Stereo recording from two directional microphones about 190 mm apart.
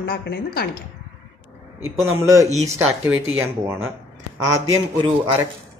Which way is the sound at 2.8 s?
10° right (ahead or behind).